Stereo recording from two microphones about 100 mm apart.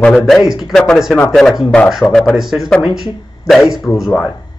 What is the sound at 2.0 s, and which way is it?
Speech, 30° left (ahead or behind).